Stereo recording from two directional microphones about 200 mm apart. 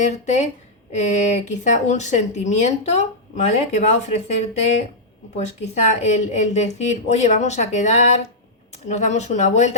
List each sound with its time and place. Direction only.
0.0 s speech: 35° left (ahead or behind)
5.4 s speech: 35° left (ahead or behind)